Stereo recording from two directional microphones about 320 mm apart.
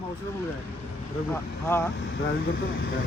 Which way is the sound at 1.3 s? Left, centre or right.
Centre.